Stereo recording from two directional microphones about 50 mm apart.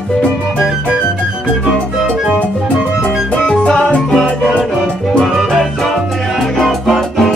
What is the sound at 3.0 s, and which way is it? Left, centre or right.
Music, left.